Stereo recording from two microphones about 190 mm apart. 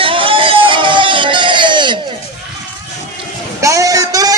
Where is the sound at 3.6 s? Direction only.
15° right (ahead or behind).